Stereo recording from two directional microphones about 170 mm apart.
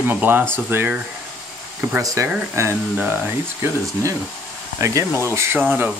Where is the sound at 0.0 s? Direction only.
10° right (ahead or behind).